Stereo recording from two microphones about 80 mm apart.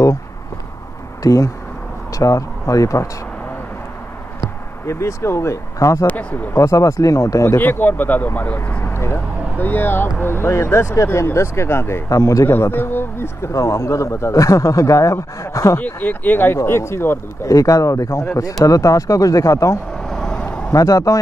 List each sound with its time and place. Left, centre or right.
1.2 s speech: left
4.8 s a man's voice: left
6.0 s speech: left
6.5 s a man's voice: left
7.5 s speech: left
12.1 s speech: left
12.4 s speech: left
13.5 s a man's voice: left
15.8 s a man's voice: left
17.5 s speech: left
20.0 s vehicle: centre
20.7 s speech: left